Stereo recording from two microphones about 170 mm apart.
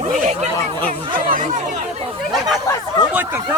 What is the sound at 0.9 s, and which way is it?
Chatter, 50° right (ahead or behind).